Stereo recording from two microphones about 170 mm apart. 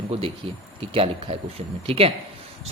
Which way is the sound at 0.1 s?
35° right (ahead or behind).